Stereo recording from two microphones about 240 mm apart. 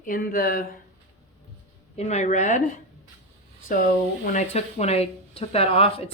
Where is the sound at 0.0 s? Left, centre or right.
Left.